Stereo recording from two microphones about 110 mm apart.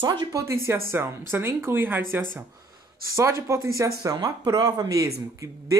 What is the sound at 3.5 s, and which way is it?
Speech, 25° right (ahead or behind).